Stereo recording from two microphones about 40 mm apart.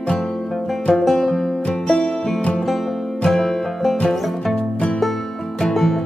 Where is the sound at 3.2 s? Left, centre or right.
Centre.